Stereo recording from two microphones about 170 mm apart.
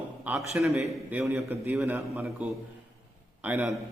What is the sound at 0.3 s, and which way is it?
A man's voice, 5° right (ahead or behind).